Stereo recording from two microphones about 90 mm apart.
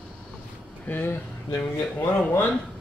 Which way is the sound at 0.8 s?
20° left (ahead or behind).